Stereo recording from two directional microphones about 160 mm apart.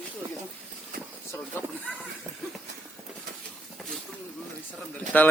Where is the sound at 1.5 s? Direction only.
15° left (ahead or behind).